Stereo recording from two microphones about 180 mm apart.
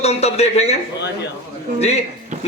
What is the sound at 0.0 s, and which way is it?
Speech, 35° left (ahead or behind).